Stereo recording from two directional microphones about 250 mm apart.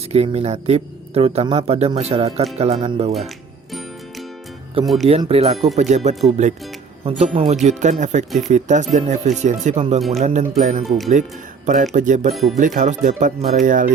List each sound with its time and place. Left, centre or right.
0.1 s speech: right
5.0 s speech: right
12.3 s speech: centre
12.5 s speech: right